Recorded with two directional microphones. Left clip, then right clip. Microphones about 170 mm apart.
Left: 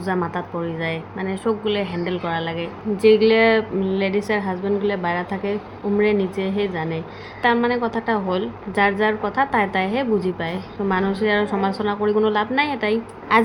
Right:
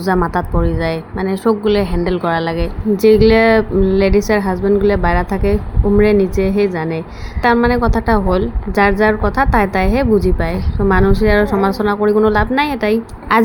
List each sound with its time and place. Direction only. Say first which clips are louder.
0.0 s a woman's voice: right 8 dB; 35° right (ahead or behind)